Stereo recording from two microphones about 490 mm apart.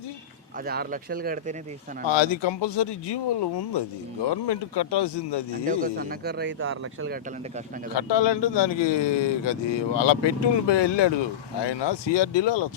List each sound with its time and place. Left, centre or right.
0.6 s speech: centre
2.0 s speech: left
5.6 s speech: centre
7.9 s speech: left